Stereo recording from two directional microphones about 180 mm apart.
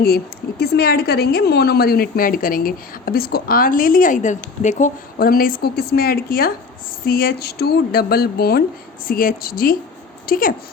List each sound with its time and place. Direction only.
0.6 s a woman's voice: 60° left (ahead or behind); by 4.9 s 40° left (ahead or behind)
5.1 s a woman's voice: 55° left (ahead or behind)